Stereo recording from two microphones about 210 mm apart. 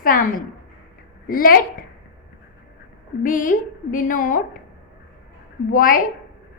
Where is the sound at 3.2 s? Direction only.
40° left (ahead or behind).